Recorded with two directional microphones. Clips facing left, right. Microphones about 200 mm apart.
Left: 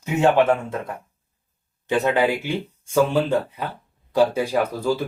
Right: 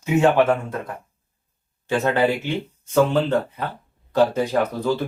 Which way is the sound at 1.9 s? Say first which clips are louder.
Even; 15° left (ahead or behind).